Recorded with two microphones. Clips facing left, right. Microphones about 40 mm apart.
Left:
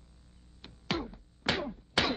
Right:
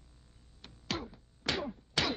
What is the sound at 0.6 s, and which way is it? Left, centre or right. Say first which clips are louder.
Music: left 4 dB; centre.